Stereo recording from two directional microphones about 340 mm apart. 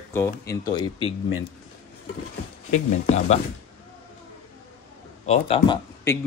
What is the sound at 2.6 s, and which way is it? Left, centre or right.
Speech, left.